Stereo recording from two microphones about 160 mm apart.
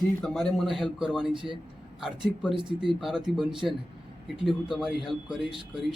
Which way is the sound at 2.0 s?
5° right (ahead or behind).